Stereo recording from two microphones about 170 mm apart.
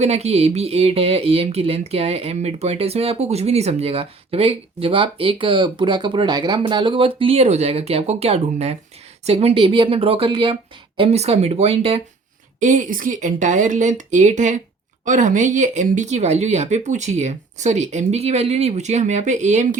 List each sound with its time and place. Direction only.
0.0 s speech: 40° right (ahead or behind)
12.5 s speech: 45° right (ahead or behind)